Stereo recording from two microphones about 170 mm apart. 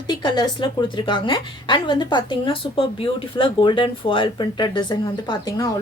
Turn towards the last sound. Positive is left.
turn(degrees=25)  # may be behind; listen again after turning